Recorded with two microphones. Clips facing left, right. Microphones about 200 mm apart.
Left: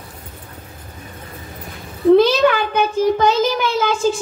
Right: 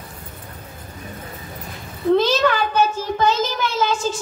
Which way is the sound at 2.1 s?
15° left (ahead or behind).